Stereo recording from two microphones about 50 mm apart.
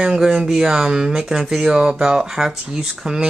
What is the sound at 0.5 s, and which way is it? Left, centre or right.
Speech, centre.